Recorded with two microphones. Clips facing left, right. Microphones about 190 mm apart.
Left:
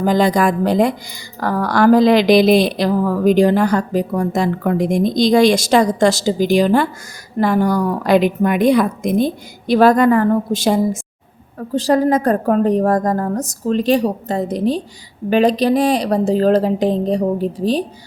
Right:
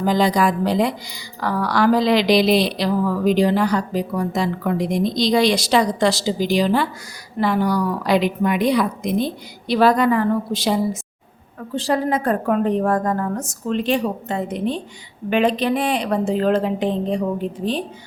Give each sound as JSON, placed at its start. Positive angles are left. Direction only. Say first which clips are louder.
{"t": 0.0, "sound": "speech", "louder": "left 3 dB", "side_deg": 50}